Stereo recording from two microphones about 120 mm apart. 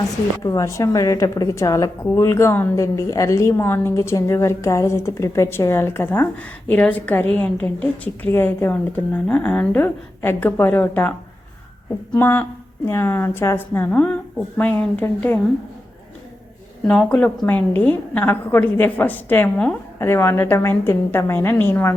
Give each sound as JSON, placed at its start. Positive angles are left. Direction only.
{"t": 0.4, "sound": "a woman's voice", "side_deg": 25}
{"t": 12.1, "sound": "a woman's voice", "side_deg": 15}
{"t": 16.9, "sound": "a woman's voice", "side_deg": 10}